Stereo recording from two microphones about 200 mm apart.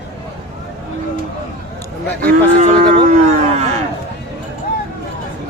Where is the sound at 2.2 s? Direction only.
35° right (ahead or behind).